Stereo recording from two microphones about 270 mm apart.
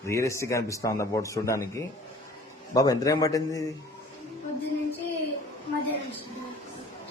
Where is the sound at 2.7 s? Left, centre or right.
Centre.